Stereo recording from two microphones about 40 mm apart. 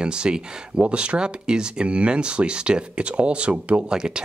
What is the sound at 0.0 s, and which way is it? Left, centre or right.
Speech, right.